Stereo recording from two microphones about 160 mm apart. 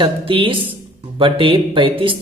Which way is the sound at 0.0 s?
30° right (ahead or behind).